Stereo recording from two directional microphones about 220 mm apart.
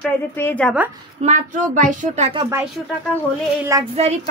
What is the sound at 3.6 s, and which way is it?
Speech, 15° right (ahead or behind).